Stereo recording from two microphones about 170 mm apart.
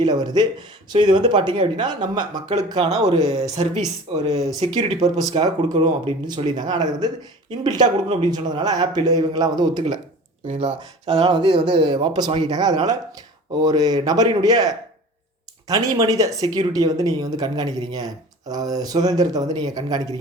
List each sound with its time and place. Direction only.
0.0 s speech: 25° right (ahead or behind)
2.9 s speech: 40° right (ahead or behind)
5.3 s speech: 25° right (ahead or behind)
10.4 s speech: 40° right (ahead or behind); by 20.1 s 20° right (ahead or behind)